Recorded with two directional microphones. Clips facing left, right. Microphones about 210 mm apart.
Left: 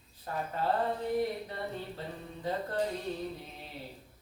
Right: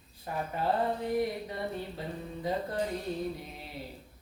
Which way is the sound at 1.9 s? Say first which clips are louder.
Right 3 dB; 10° right (ahead or behind).